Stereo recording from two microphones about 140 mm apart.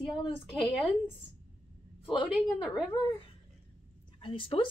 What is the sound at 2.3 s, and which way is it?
Speech, 5° right (ahead or behind).